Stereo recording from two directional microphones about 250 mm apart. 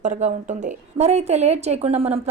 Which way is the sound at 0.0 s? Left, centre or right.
Right.